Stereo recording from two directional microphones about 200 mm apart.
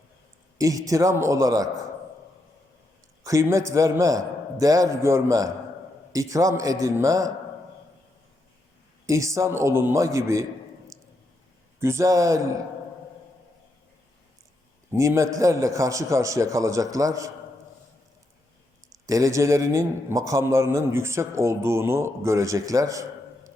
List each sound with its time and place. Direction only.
0.6 s a man's voice: 15° right (ahead or behind)
3.2 s a man's voice: 15° right (ahead or behind)
9.0 s a man's voice: 15° right (ahead or behind)
10.9 s a sound: 15° right (ahead or behind)
11.8 s a man's voice: 15° right (ahead or behind)
14.9 s a man's voice: 15° right (ahead or behind)
19.0 s a man's voice: 15° right (ahead or behind)